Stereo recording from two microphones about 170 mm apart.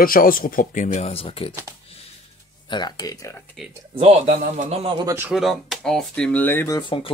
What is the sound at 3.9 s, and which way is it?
Speech, 35° right (ahead or behind).